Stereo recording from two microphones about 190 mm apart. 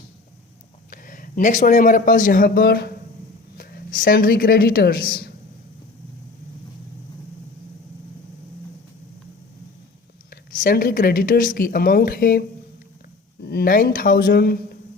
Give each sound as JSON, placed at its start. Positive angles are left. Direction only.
{"t": 0.9, "sound": "a man's voice", "side_deg": 45}
{"t": 10.2, "sound": "speech", "side_deg": 45}